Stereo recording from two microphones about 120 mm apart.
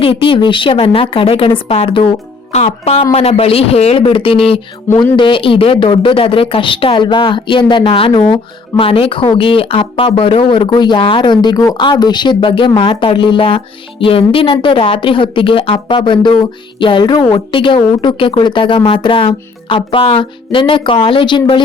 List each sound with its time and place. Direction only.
0.0 s a woman's voice: 50° left (ahead or behind)
2.5 s a woman's voice: 60° left (ahead or behind); by 21.6 s 40° left (ahead or behind)